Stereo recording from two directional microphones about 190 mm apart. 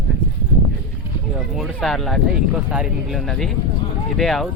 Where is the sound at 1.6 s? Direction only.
Centre (ahead or behind).